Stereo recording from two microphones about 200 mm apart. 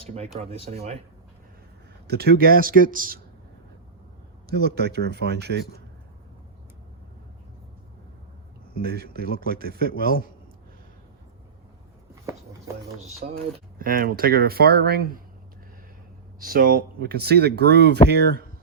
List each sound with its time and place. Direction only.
0.0 s speech: 30° right (ahead or behind)
2.0 s speech: 50° right (ahead or behind)
4.4 s speech: 55° right (ahead or behind)
8.8 s speech: 50° right (ahead or behind)
13.2 s speech: 50° right (ahead or behind)
16.4 s speech: 45° right (ahead or behind)